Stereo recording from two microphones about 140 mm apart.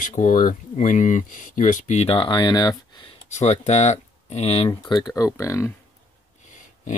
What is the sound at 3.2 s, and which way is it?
Speech, 55° left (ahead or behind).